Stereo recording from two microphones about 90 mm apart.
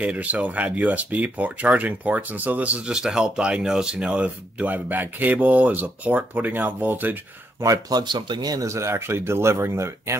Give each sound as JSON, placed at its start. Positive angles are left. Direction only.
{"t": 0.0, "sound": "speech", "side_deg": -15}
{"t": 7.6, "sound": "speech", "side_deg": -40}
{"t": 8.0, "sound": "speech", "side_deg": -55}
{"t": 8.6, "sound": "speech", "side_deg": -35}